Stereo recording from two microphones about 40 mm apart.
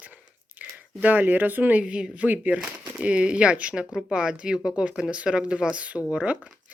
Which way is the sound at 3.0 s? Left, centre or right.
Right.